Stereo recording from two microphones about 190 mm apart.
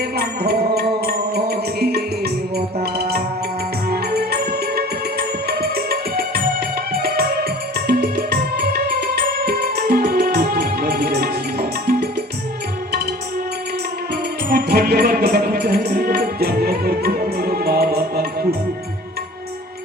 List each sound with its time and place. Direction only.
0.2 s music: 55° right (ahead or behind)
14.5 s music: 55° right (ahead or behind)